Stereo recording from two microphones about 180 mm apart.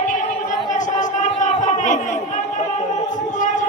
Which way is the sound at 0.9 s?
45° left (ahead or behind).